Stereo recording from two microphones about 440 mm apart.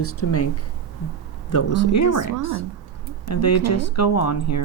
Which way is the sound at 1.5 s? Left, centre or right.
Left.